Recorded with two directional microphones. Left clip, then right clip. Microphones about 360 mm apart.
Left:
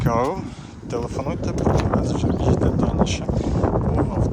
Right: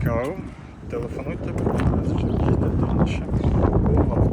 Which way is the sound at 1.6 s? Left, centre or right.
Left.